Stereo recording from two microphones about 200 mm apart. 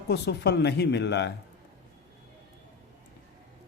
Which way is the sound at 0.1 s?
55° left (ahead or behind).